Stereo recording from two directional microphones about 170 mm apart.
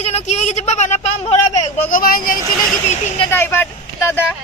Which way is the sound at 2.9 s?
35° left (ahead or behind).